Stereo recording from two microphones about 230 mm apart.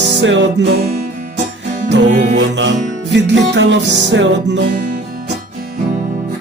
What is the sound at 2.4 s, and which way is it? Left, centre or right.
Music, right.